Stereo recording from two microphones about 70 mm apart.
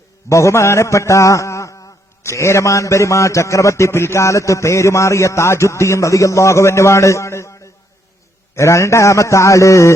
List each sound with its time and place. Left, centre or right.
0.3 s a man's voice: left